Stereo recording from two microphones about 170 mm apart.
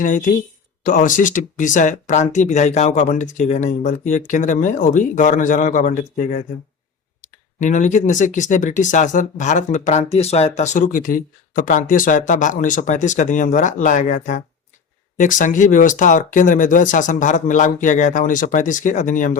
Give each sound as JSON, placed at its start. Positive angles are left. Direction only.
{"t": 0.0, "sound": "speech", "side_deg": 50}
{"t": 7.6, "sound": "speech", "side_deg": 45}